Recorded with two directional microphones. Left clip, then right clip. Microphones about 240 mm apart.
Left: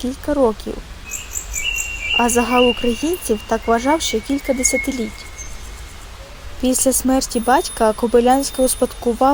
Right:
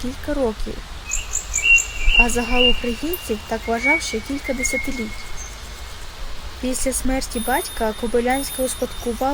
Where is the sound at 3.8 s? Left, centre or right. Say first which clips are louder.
Left 1 dB; centre.